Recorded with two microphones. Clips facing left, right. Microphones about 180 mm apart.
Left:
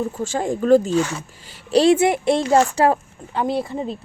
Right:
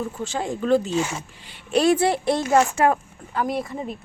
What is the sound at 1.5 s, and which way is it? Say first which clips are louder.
Speech: left 4 dB; 30° left (ahead or behind).